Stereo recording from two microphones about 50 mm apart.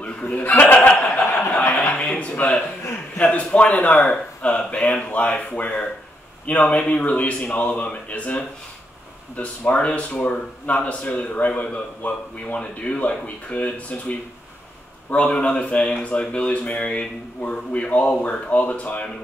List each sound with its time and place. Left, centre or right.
0.0 s chuckle: left
0.5 s speech: left
0.8 s chuckle: left
2.1 s a sound: left
3.2 s a man's voice: left